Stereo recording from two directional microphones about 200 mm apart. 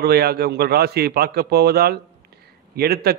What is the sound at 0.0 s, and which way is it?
A man's voice, 50° right (ahead or behind).